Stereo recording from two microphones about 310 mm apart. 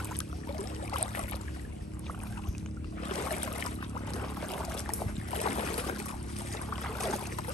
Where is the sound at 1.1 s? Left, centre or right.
Centre.